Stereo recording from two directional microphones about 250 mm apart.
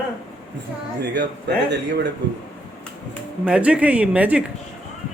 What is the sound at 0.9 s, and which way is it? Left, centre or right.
A man's voice, right.